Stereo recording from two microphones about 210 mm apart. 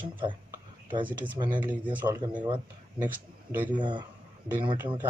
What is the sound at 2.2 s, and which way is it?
Speech, 20° right (ahead or behind).